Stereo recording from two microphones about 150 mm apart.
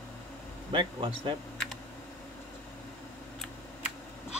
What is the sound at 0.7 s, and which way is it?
Speech, 35° right (ahead or behind).